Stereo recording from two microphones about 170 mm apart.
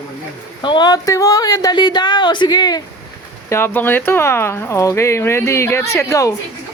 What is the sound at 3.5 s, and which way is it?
Speech, 10° left (ahead or behind).